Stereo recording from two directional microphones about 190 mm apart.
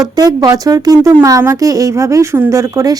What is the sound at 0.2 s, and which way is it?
Speech, 20° right (ahead or behind).